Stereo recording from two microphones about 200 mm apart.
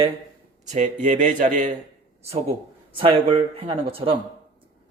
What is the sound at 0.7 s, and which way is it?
Speech, 35° right (ahead or behind).